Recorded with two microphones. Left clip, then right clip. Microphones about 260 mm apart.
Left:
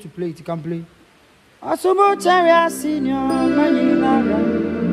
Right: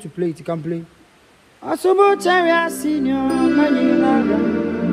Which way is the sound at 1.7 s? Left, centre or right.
Left.